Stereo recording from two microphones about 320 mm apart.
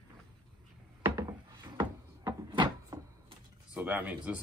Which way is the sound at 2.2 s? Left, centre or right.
Centre.